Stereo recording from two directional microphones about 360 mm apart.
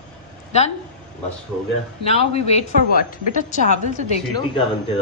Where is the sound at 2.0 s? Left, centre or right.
Centre.